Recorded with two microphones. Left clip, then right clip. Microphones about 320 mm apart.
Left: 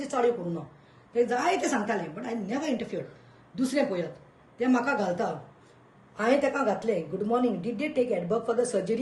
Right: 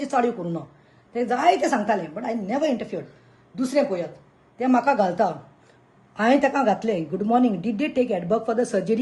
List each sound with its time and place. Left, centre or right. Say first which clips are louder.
0.0 s a woman's voice: right 3 dB; right